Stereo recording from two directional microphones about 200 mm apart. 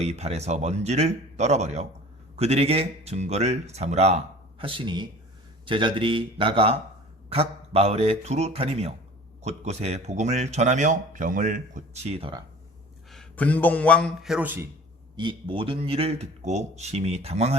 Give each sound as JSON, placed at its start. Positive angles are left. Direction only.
{"t": 0.0, "sound": "speech", "side_deg": -30}
{"t": 13.1, "sound": "a man's voice", "side_deg": 5}
{"t": 15.1, "sound": "speech", "side_deg": -25}